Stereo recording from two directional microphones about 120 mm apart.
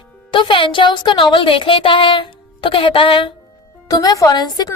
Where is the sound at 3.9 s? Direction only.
30° left (ahead or behind).